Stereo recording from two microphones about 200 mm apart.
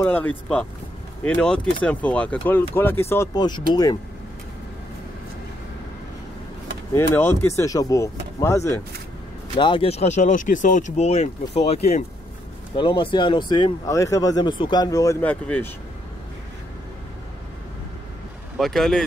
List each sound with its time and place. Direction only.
0.0 s speech: 10° left (ahead or behind)
6.9 s speech: 10° left (ahead or behind)
9.6 s speech: 25° left (ahead or behind); by 15.7 s 5° left (ahead or behind)
18.6 s speech: centre (ahead or behind)